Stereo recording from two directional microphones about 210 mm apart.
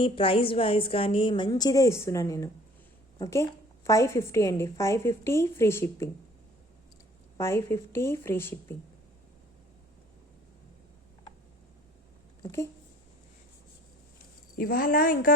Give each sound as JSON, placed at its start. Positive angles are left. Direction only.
{"t": 0.0, "sound": "a woman's voice", "side_deg": 25}
{"t": 7.3, "sound": "a woman's voice", "side_deg": 10}
{"t": 12.4, "sound": "speech", "side_deg": 15}
{"t": 14.6, "sound": "a woman's voice", "side_deg": 45}